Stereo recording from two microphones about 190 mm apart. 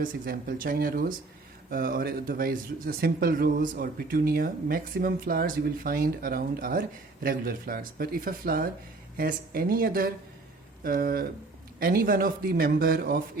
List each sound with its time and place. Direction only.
0.0 s speech: 50° right (ahead or behind)